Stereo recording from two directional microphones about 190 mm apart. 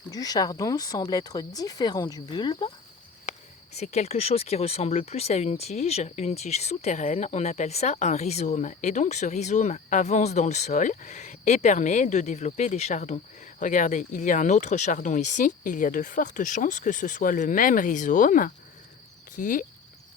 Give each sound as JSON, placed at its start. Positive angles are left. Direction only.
{"t": 0.1, "sound": "speech", "side_deg": 20}
{"t": 3.3, "sound": "cricket", "side_deg": 40}
{"t": 3.8, "sound": "speech", "side_deg": 35}